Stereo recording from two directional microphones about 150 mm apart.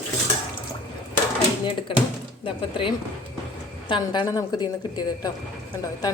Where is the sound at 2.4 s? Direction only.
35° left (ahead or behind).